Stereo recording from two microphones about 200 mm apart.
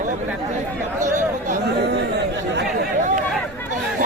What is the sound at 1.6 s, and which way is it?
Chatter, 55° right (ahead or behind).